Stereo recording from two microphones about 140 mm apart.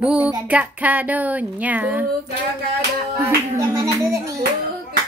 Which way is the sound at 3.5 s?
20° right (ahead or behind).